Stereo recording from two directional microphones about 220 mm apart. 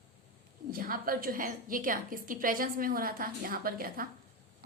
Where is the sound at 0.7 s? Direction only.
40° right (ahead or behind).